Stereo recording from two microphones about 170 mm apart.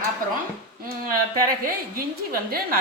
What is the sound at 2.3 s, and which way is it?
Speech, 60° right (ahead or behind).